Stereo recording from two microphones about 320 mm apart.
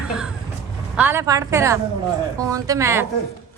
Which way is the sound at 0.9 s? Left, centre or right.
Centre.